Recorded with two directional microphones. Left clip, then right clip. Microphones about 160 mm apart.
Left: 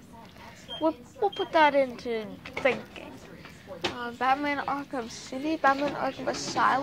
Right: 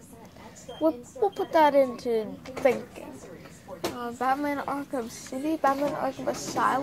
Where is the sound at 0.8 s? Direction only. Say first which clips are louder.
Right 2 dB; 25° right (ahead or behind).